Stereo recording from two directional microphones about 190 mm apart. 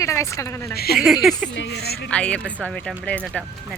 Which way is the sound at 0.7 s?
55° left (ahead or behind).